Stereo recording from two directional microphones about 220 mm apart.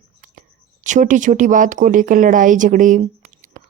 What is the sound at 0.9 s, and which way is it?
Speech, 35° right (ahead or behind).